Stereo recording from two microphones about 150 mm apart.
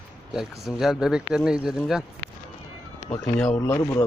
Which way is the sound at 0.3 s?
Centre (ahead or behind).